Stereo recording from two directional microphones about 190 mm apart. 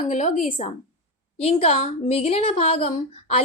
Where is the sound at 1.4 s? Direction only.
30° left (ahead or behind).